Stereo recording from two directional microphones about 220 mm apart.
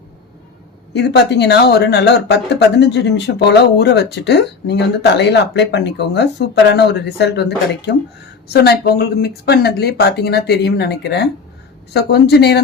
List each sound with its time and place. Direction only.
0.9 s speech: 50° left (ahead or behind)